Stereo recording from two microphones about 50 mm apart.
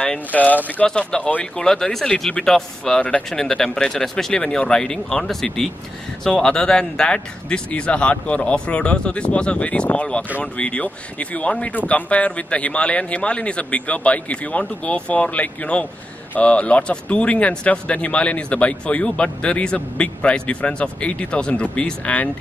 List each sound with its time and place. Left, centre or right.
0.3 s speech: left
0.8 s speech: centre
3.0 s speech: left
3.3 s speech: centre; by 22.3 s left